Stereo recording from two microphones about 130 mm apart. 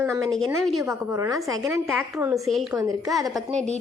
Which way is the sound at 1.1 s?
25° right (ahead or behind).